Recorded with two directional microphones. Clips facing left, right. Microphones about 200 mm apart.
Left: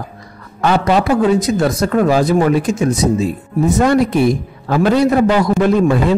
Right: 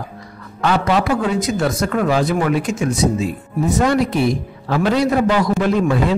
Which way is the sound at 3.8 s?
50° left (ahead or behind).